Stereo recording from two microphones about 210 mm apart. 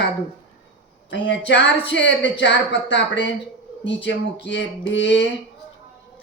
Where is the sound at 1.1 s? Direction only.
55° left (ahead or behind).